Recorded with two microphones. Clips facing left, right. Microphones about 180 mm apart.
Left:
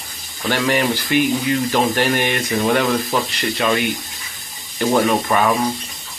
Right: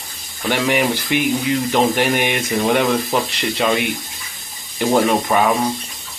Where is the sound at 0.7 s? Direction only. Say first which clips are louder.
Left 1 dB; 20° right (ahead or behind).